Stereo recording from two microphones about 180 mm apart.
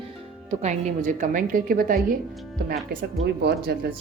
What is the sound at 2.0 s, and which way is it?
Speech, centre (ahead or behind).